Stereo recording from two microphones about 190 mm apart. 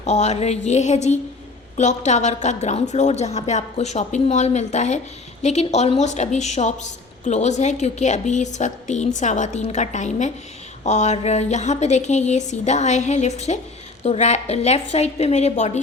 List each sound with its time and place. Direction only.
0.0 s a woman's voice: 35° left (ahead or behind)